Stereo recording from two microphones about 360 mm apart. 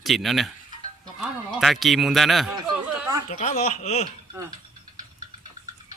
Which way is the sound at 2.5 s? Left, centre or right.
Centre.